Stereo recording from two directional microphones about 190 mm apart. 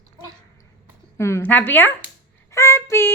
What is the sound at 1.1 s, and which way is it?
Speech, 15° left (ahead or behind).